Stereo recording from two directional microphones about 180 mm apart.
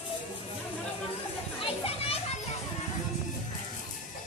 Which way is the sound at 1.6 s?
30° left (ahead or behind).